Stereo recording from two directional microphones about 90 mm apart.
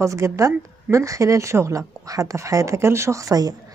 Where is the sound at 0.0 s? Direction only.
35° right (ahead or behind).